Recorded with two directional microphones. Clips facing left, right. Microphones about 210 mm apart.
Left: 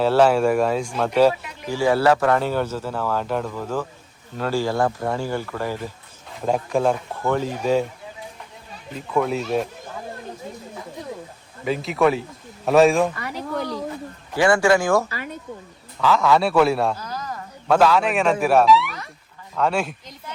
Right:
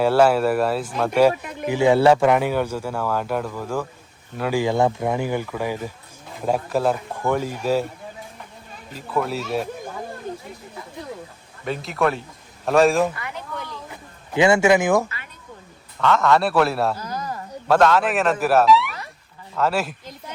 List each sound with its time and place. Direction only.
0.0 s speech: 10° right (ahead or behind)
1.3 s a sound: 50° right (ahead or behind)
1.7 s speech: 25° right (ahead or behind)
2.2 s speech: 15° right (ahead or behind)
8.9 s speech: centre (ahead or behind)
11.6 s speech: centre (ahead or behind)
13.1 s a sound: 40° left (ahead or behind)
14.3 s speech: 20° right (ahead or behind)
16.0 s speech: centre (ahead or behind)
17.7 s speech: centre (ahead or behind)